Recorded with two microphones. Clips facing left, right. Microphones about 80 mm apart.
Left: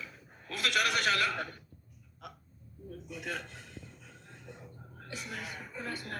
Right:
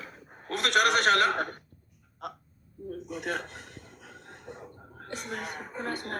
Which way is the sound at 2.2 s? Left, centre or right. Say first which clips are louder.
Right 9 dB; right.